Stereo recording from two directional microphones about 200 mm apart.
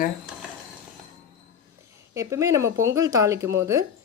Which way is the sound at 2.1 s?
15° right (ahead or behind).